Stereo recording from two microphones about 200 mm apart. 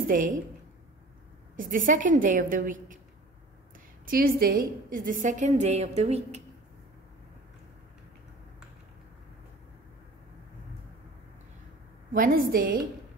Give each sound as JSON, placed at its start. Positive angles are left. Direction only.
{"t": 0.1, "sound": "a woman's voice", "side_deg": -40}
{"t": 1.6, "sound": "a woman's voice", "side_deg": -40}
{"t": 4.0, "sound": "a woman's voice", "side_deg": -45}
{"t": 12.1, "sound": "a woman's voice", "side_deg": -45}